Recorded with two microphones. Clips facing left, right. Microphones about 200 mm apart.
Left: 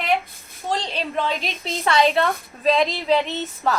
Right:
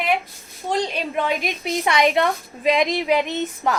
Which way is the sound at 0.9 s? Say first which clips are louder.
Right 1 dB; 10° right (ahead or behind).